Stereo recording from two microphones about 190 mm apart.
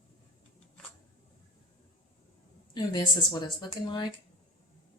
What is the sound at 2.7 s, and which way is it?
A woman's voice, 20° left (ahead or behind).